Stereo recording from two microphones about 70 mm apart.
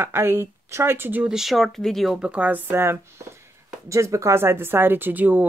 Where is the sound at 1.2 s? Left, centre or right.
Centre.